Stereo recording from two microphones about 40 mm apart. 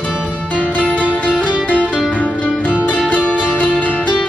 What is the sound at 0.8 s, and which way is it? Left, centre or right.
Music, right.